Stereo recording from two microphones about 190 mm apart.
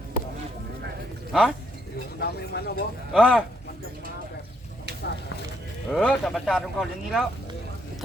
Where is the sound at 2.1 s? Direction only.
55° left (ahead or behind).